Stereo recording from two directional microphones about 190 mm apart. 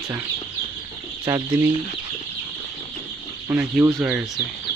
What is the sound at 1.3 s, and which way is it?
Speech, 15° right (ahead or behind).